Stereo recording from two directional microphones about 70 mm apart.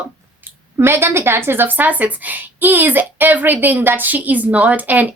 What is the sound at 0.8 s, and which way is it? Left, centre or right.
A woman's voice, right.